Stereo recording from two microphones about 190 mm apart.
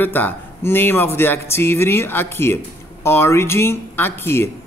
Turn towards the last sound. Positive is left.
turn(degrees=10)  # may be behind; listen again after turning